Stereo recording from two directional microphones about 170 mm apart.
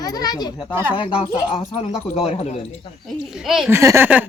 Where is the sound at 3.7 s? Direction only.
15° right (ahead or behind).